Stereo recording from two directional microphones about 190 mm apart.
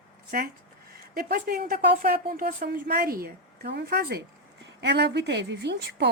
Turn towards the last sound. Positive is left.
turn(degrees=-65)  # may be behind; listen again after turning